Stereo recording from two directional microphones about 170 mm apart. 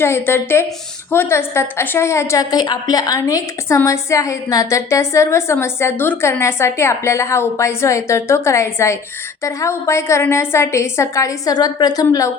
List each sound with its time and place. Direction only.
0.0 s a woman's voice: 15° left (ahead or behind)